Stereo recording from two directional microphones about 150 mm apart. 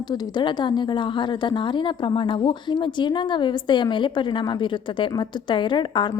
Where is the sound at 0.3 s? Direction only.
30° left (ahead or behind).